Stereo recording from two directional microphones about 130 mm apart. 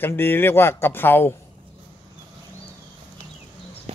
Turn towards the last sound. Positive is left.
turn(degrees=-50)  # may be behind; listen again after turning